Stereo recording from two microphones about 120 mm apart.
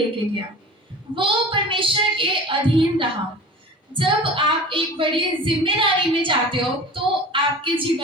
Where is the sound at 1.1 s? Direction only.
45° right (ahead or behind).